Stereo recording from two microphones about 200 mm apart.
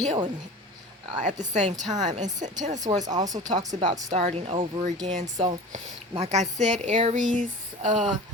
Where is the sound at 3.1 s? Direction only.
20° right (ahead or behind).